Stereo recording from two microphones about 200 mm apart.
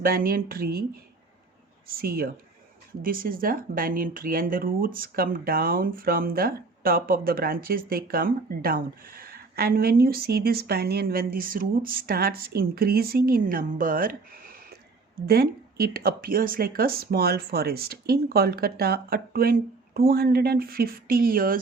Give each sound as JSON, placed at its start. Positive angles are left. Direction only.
{"t": 0.0, "sound": "speech", "side_deg": -45}
{"t": 1.9, "sound": "speech", "side_deg": -50}